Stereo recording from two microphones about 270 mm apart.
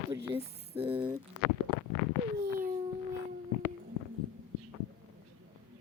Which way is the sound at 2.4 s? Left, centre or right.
Centre.